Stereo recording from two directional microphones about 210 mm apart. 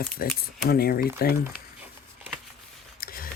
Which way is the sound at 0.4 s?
45° left (ahead or behind).